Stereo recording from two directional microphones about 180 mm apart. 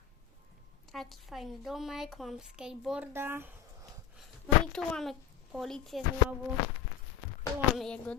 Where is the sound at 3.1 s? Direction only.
10° right (ahead or behind).